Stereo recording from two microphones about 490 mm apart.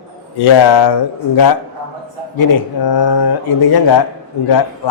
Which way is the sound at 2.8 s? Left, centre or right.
Left.